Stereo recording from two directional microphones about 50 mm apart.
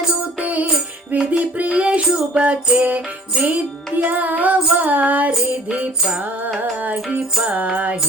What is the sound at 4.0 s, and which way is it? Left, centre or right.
Child singing, right.